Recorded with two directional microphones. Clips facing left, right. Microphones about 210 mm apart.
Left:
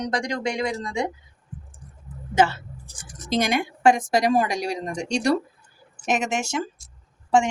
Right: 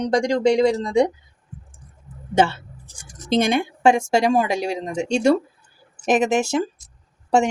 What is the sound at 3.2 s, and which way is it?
A woman's voice, 25° right (ahead or behind).